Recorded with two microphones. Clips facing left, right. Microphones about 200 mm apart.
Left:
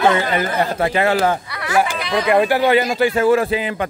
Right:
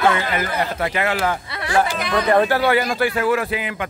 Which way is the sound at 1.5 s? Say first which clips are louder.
Left 1 dB; 25° right (ahead or behind).